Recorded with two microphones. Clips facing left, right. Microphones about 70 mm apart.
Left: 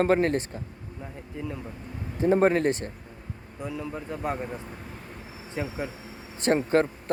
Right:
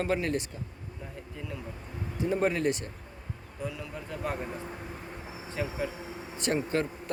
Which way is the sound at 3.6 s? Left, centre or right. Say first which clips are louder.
Left 4 dB; left.